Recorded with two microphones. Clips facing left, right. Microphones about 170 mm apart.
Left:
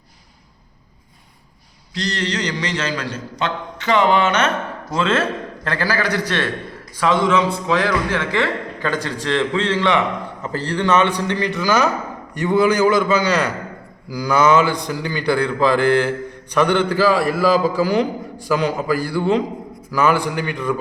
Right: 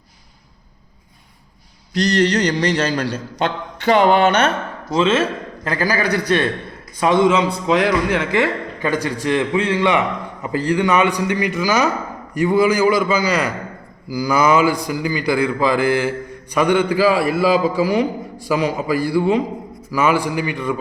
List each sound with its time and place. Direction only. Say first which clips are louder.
2.0 s a man's voice: right 7 dB; 40° right (ahead or behind)
5.6 s a man's voice: right 2 dB; 15° right (ahead or behind)